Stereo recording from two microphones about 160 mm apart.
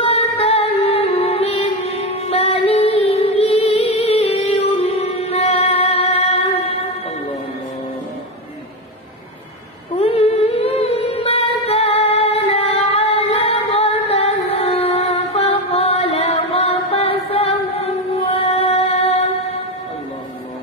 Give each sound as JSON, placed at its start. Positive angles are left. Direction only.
{"t": 0.0, "sound": "music", "side_deg": 40}
{"t": 9.9, "sound": "humming", "side_deg": 40}